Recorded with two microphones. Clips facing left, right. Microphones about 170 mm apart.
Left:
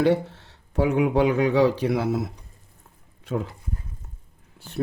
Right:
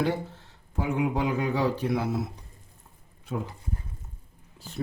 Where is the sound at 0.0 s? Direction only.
75° left (ahead or behind); by 2.0 s 90° left.